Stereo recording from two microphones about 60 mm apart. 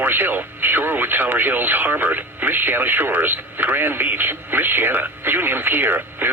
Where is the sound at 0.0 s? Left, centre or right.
Right.